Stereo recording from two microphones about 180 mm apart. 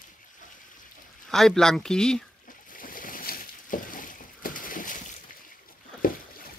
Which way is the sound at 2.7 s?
50° left (ahead or behind).